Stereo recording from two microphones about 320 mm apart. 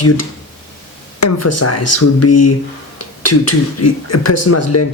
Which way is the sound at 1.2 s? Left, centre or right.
Left.